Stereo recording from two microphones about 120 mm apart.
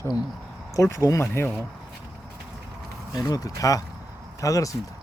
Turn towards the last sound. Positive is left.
turn(degrees=30)  # may be behind; listen again after turning